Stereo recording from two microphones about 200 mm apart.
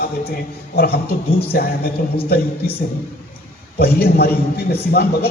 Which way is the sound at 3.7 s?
50° left (ahead or behind).